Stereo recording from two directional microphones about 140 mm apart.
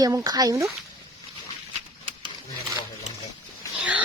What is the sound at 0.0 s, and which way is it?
Speech, 25° right (ahead or behind).